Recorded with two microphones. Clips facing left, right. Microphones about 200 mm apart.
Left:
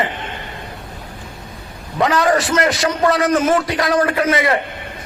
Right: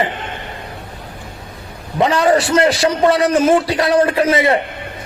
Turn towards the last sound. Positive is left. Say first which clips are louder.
# right 3 dB
turn(degrees=-30)  # may be behind; listen again after turning